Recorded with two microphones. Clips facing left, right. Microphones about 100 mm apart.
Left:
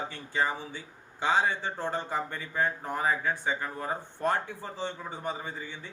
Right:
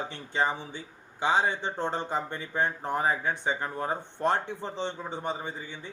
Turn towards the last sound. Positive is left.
turn(degrees=-20)  # may be behind; listen again after turning